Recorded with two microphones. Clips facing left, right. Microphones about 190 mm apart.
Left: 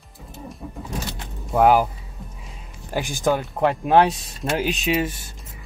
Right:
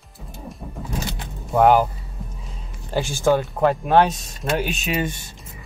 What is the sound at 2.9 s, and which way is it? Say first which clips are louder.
Speech: right 3 dB; 15° left (ahead or behind).